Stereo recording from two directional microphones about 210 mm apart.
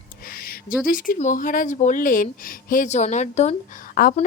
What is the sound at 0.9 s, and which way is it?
Speech, 40° left (ahead or behind).